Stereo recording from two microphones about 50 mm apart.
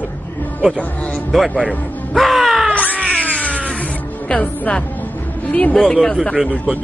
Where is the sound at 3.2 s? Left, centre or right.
Left.